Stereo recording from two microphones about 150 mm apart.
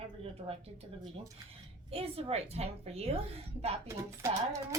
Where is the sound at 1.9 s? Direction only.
40° right (ahead or behind).